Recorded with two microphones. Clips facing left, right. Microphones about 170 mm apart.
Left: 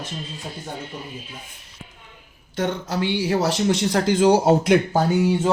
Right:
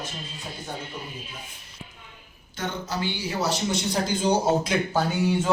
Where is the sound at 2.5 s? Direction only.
75° left (ahead or behind).